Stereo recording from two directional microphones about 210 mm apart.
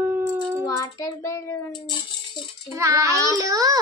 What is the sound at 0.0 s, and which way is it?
Child singing, 10° right (ahead or behind).